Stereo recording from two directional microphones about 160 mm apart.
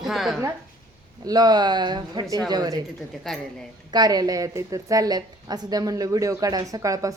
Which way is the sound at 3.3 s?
Centre (ahead or behind).